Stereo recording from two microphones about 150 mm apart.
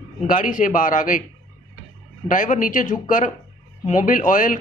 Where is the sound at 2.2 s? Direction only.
60° left (ahead or behind).